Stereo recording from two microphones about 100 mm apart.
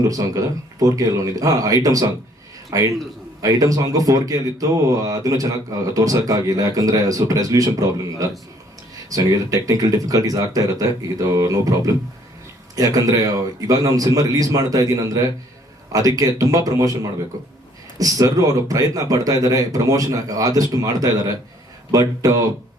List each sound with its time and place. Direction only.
0.1 s speech: 35° right (ahead or behind)